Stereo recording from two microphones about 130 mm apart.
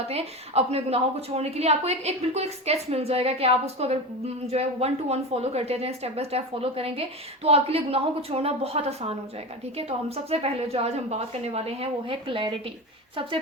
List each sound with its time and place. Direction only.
0.1 s a woman's voice: 50° right (ahead or behind)
10.2 s a woman's voice: 50° right (ahead or behind)